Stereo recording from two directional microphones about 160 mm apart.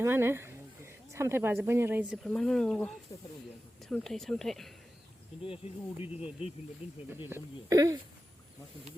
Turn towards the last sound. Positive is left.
turn(degrees=-20)  # may be behind; listen again after turning